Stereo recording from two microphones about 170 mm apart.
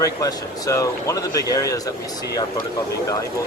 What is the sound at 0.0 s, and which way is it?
Speech, 20° left (ahead or behind).